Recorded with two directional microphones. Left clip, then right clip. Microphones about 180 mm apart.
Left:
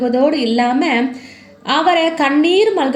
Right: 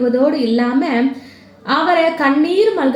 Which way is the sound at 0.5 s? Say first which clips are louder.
Left 2 dB; 30° left (ahead or behind).